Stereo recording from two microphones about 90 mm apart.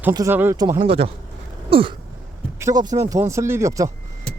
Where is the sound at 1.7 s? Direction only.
75° right (ahead or behind).